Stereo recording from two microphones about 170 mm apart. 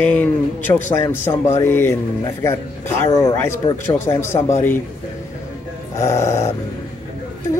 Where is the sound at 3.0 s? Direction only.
15° left (ahead or behind).